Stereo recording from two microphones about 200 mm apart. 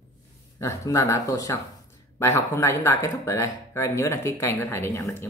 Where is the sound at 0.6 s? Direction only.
15° left (ahead or behind).